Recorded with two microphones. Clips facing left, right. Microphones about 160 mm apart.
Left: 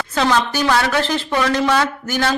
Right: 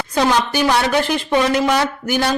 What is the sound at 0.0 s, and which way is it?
A woman's voice, 15° right (ahead or behind).